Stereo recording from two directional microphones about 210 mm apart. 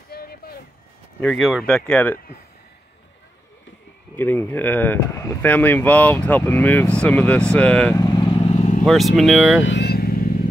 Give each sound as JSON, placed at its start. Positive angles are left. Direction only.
{"t": 0.1, "sound": "a sound", "side_deg": 45}
{"t": 1.2, "sound": "speech", "side_deg": 0}
{"t": 4.2, "sound": "speech", "side_deg": 10}
{"t": 8.0, "sound": "vehicle", "side_deg": 20}
{"t": 8.8, "sound": "speech", "side_deg": 0}
{"t": 9.6, "sound": "vehicle", "side_deg": 55}